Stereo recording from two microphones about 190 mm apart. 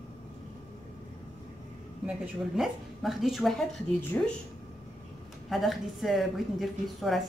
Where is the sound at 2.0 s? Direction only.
Centre (ahead or behind).